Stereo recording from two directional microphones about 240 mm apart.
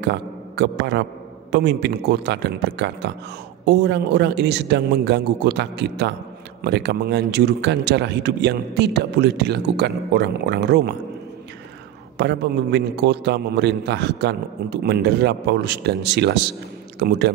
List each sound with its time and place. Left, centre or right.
0.0 s a man's voice: right
12.2 s a man's voice: right